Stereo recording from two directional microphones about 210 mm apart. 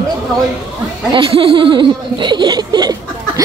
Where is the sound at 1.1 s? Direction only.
25° right (ahead or behind).